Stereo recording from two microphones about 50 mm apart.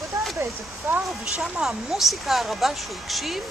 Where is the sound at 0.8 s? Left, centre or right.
Right.